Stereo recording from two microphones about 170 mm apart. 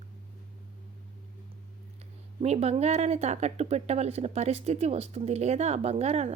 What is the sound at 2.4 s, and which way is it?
Speech, 40° right (ahead or behind).